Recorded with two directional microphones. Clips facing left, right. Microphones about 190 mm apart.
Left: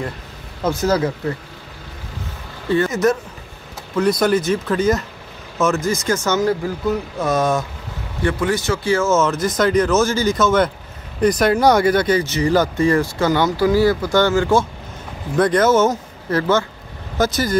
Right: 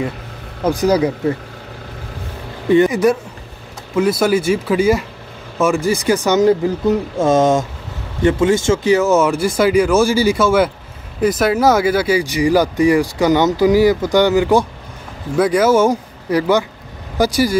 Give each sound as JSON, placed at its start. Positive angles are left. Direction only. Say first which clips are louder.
{"t": 0.7, "sound": "speech", "louder": "right 4 dB", "side_deg": -15}
{"t": 2.7, "sound": "speech", "louder": "right 5 dB", "side_deg": -15}